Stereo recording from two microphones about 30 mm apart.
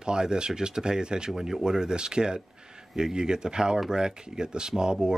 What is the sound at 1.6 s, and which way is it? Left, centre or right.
Speech, right.